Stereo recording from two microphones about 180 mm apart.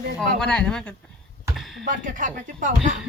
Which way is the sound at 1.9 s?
45° right (ahead or behind).